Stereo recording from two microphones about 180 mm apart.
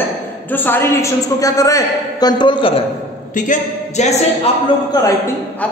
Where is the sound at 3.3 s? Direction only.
45° left (ahead or behind).